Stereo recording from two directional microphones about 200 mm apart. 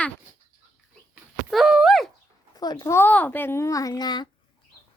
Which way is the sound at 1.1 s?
Centre (ahead or behind).